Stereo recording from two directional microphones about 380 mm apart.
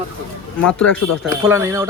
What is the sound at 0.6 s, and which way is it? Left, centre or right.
Speech, centre.